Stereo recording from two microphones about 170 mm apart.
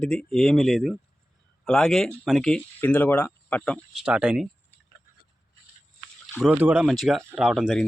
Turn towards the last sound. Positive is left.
turn(degrees=-5)  # may be behind; listen again after turning